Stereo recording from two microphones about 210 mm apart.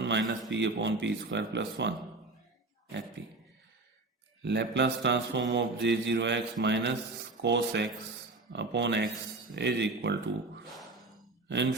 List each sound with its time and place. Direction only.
0.0 s a man's voice: 55° right (ahead or behind)
0.5 s mantra: 60° right (ahead or behind)
4.4 s mantra: 55° right (ahead or behind)
10.7 s a sound: centre (ahead or behind)
11.4 s speech: 55° right (ahead or behind)